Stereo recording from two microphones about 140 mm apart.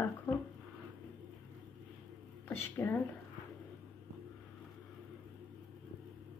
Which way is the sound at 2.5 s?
15° left (ahead or behind).